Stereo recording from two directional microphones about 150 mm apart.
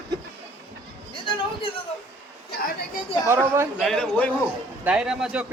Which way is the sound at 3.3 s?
15° right (ahead or behind).